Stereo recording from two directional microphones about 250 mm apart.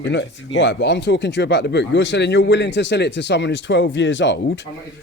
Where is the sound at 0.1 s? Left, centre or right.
Left.